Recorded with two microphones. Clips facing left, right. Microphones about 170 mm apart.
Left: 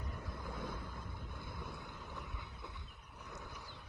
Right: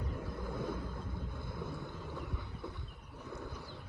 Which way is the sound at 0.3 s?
75° right (ahead or behind).